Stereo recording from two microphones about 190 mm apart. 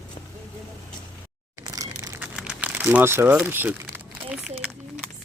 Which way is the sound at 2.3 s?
5° right (ahead or behind).